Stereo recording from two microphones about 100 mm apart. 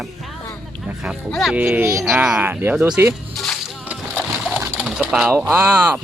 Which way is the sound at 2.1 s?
10° right (ahead or behind).